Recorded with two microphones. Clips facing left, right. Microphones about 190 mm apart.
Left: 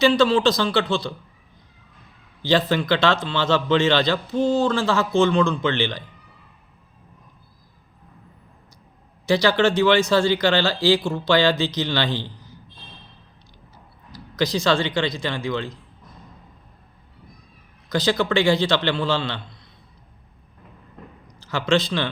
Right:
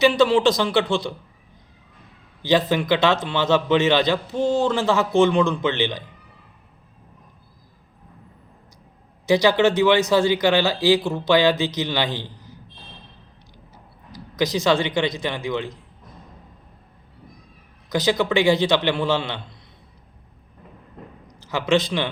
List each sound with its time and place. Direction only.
0.0 s speech: 20° right (ahead or behind)
2.4 s a man's voice: 15° right (ahead or behind)
9.2 s speech: 20° right (ahead or behind)
14.1 s a man's voice: 15° right (ahead or behind)
17.8 s a man's voice: 15° right (ahead or behind)
21.5 s speech: 20° right (ahead or behind)